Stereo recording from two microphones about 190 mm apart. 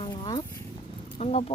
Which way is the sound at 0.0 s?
25° left (ahead or behind).